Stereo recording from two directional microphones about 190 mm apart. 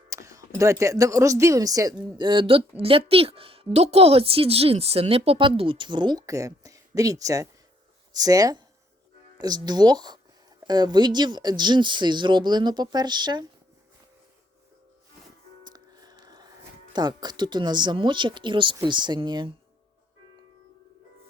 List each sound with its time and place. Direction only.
0.1 s speech: 15° right (ahead or behind)
15.6 s music: 20° right (ahead or behind)
16.9 s speech: 20° right (ahead or behind)